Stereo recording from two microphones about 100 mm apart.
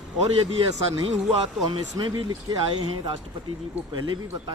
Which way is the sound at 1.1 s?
90° right.